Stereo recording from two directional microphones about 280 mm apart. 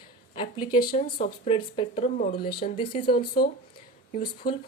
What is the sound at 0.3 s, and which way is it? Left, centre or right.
A woman's voice, centre.